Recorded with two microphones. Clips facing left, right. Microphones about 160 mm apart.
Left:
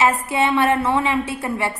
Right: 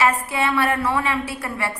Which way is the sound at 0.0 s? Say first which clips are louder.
Left 2 dB; 20° left (ahead or behind).